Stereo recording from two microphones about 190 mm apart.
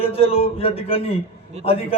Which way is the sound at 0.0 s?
30° left (ahead or behind).